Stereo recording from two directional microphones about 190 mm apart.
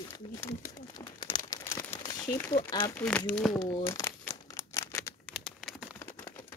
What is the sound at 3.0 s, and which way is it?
Speech, 5° left (ahead or behind).